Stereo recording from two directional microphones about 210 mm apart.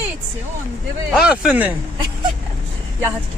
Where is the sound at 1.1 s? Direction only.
5° right (ahead or behind).